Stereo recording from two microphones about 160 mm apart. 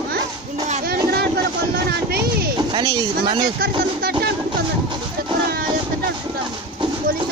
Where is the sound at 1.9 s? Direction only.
80° right.